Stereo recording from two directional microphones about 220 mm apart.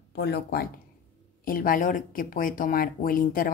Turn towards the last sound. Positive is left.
turn(degrees=40)  # may be behind; listen again after turning